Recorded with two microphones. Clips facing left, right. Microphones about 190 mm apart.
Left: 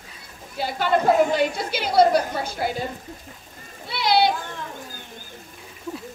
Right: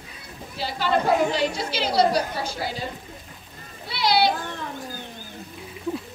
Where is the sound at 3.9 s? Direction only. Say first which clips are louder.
Left 1 dB; 50° left (ahead or behind).